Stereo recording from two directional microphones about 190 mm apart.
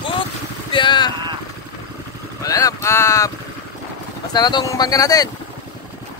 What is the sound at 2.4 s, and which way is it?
Speech, 20° left (ahead or behind).